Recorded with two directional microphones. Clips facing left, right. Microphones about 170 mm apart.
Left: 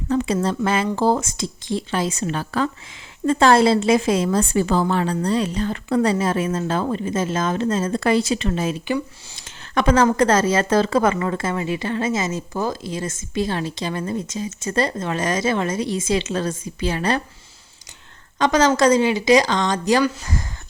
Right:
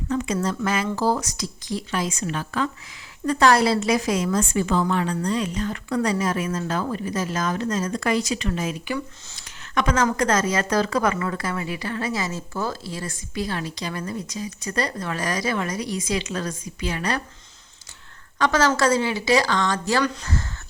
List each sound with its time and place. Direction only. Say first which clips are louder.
0.1 s a sound: left 4 dB; 35° left (ahead or behind)
0.4 s a woman's voice: left 3 dB; 30° left (ahead or behind)
18.3 s a woman's voice: left 4 dB; 20° left (ahead or behind)